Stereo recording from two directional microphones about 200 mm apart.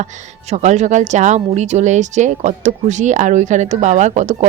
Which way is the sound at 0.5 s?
35° right (ahead or behind).